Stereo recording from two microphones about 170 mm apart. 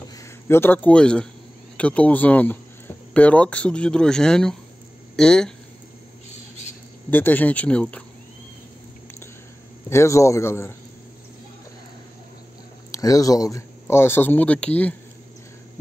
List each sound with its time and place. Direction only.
0.2 s a man's voice: 15° left (ahead or behind)
7.1 s speech: 10° left (ahead or behind)
9.8 s speech: 15° left (ahead or behind)
12.9 s speech: 20° left (ahead or behind)